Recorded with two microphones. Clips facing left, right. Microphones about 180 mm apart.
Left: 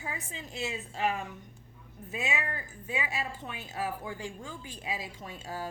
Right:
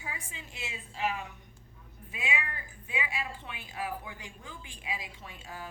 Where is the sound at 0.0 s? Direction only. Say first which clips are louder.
Left 4 dB; 40° left (ahead or behind).